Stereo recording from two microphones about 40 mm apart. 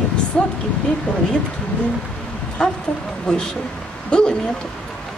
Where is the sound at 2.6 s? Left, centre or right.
Left.